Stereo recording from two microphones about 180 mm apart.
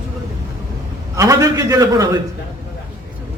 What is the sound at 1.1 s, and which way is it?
A man's voice, 20° right (ahead or behind).